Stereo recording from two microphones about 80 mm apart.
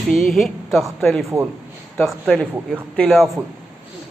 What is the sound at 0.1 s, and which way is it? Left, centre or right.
Speech, centre.